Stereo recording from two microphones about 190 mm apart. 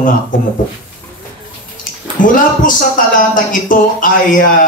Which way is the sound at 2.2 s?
45° left (ahead or behind).